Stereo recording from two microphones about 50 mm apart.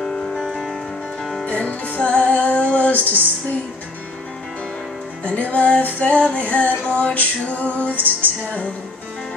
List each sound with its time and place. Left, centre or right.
0.0 s music: centre
1.4 s music: left
5.2 s music: left